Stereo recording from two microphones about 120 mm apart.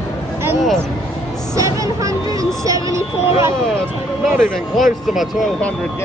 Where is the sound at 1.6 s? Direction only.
25° right (ahead or behind).